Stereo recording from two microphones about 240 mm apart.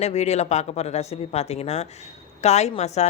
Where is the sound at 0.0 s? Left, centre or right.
Left.